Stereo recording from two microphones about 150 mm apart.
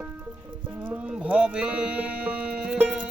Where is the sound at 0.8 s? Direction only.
10° right (ahead or behind).